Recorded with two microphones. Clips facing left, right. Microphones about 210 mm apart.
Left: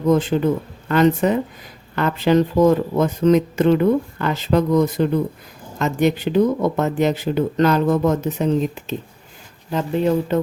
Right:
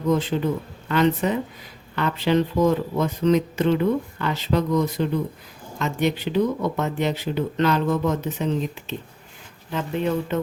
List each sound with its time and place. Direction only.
0.1 s speech: 50° left (ahead or behind)